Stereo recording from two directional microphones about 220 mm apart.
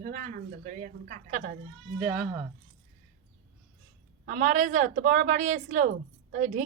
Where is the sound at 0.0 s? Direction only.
40° right (ahead or behind).